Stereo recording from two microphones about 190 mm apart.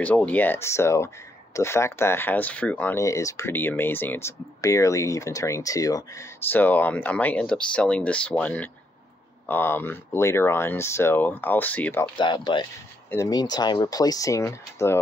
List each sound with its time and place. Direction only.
0.0 s speech: 10° left (ahead or behind)
12.2 s speech: 25° left (ahead or behind)